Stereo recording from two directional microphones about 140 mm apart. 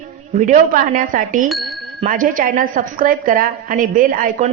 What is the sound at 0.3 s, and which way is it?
A woman's voice, 70° right (ahead or behind).